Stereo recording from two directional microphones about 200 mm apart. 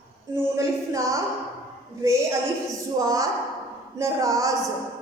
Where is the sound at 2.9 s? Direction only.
15° right (ahead or behind).